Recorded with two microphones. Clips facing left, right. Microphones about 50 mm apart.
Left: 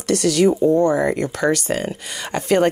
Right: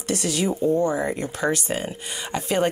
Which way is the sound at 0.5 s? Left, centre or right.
Left.